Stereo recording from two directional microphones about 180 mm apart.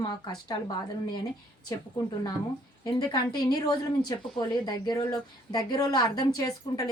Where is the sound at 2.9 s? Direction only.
25° left (ahead or behind).